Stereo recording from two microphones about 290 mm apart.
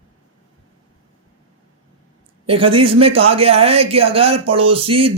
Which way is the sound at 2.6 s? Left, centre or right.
Centre.